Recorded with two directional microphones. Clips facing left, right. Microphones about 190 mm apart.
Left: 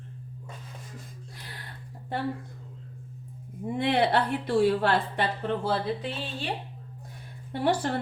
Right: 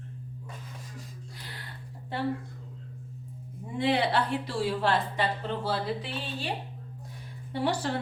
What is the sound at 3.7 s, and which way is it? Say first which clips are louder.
Speech: left 2 dB; 55° left (ahead or behind).